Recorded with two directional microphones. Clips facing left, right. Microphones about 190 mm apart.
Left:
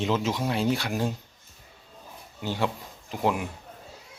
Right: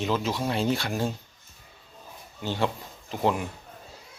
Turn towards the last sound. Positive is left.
turn(degrees=10)  # may be behind; listen again after turning